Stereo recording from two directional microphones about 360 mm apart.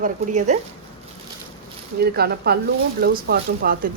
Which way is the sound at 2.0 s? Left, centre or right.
Right.